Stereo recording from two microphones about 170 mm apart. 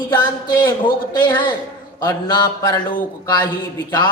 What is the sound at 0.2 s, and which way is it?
A woman's voice, 25° left (ahead or behind).